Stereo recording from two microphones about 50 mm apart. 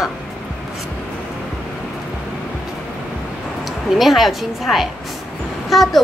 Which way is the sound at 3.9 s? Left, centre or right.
Centre.